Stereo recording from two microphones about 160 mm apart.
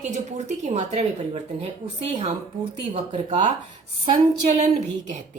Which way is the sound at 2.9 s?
40° right (ahead or behind).